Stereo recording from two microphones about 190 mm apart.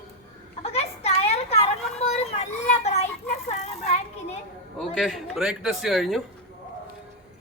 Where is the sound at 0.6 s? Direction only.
35° left (ahead or behind).